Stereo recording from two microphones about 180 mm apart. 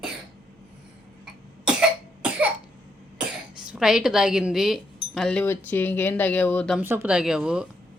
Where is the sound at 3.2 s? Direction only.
5° right (ahead or behind).